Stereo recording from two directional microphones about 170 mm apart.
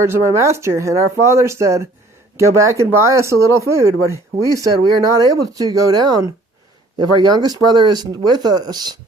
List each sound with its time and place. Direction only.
0.0 s speech: 15° right (ahead or behind)